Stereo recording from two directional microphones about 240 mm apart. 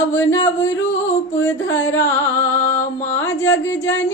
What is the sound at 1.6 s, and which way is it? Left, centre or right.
Carnatic music, left.